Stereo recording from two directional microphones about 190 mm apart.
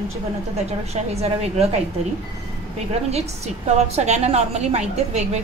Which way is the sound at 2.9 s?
35° right (ahead or behind).